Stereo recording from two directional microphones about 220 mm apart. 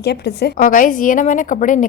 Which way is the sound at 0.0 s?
50° left (ahead or behind).